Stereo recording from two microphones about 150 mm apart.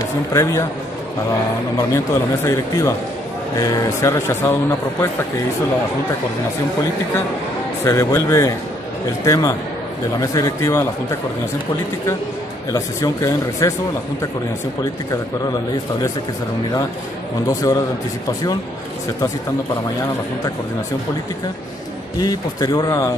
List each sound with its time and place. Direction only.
0.3 s speech: 20° left (ahead or behind)
2.4 s speech: 20° left (ahead or behind)
7.8 s speech: 20° left (ahead or behind)
12.7 s speech: 20° left (ahead or behind)
17.5 s speech: 25° left (ahead or behind)
22.2 s speech: 25° left (ahead or behind)